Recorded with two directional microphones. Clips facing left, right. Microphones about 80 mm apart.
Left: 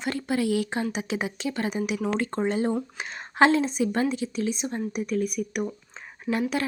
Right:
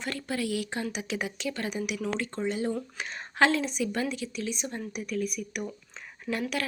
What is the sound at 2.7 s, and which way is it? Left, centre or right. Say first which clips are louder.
Speech: left 4 dB; left.